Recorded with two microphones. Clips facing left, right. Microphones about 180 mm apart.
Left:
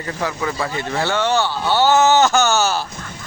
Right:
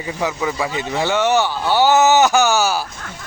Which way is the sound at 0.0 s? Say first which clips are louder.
Right 2 dB; 10° right (ahead or behind).